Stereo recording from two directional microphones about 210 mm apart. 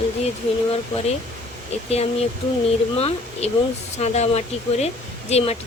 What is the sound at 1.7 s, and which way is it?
Speech, 30° left (ahead or behind).